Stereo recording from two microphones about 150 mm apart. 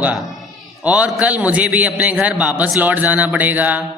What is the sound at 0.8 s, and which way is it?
Speech, 10° right (ahead or behind).